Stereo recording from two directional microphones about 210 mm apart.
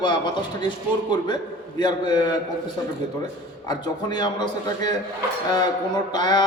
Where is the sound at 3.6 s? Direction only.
20° left (ahead or behind).